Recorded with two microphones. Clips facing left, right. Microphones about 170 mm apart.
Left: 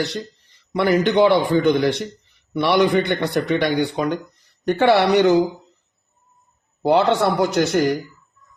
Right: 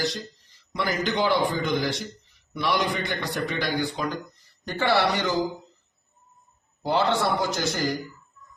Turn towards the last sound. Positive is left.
turn(degrees=70)  # may be behind; listen again after turning